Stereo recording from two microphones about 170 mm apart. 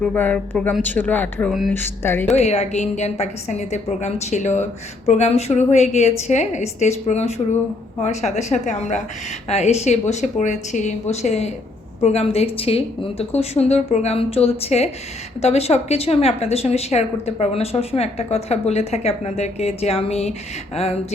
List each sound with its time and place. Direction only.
0.0 s speech: 10° left (ahead or behind)
2.3 s a woman's voice: 40° left (ahead or behind)